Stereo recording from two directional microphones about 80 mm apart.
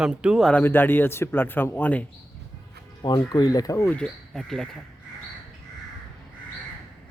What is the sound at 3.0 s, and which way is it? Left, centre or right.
Speech, left.